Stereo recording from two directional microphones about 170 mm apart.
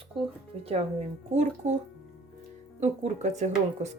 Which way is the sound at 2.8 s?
45° right (ahead or behind).